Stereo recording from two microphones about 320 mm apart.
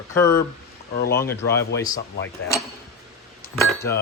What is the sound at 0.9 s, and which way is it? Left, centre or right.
Speech, left.